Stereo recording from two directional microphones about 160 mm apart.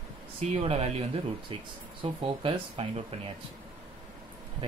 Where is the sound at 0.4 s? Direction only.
40° right (ahead or behind).